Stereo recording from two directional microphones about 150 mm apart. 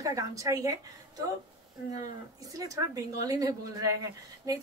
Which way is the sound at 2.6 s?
20° right (ahead or behind).